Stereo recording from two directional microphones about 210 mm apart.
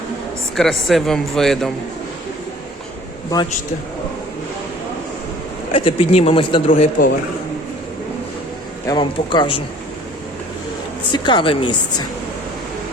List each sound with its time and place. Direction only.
0.5 s speech: centre (ahead or behind)
5.7 s speech: 25° left (ahead or behind)
6.7 s speech: 40° left (ahead or behind)
8.9 s speech: 20° left (ahead or behind)
11.1 s speech: 20° left (ahead or behind)